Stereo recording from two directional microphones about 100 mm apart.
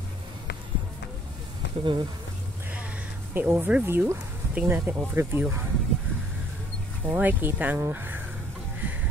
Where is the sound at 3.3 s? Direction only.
20° right (ahead or behind).